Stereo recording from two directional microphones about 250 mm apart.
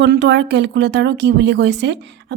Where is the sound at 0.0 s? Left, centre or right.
Right.